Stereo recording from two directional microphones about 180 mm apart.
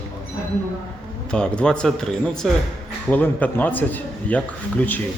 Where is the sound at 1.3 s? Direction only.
5° left (ahead or behind).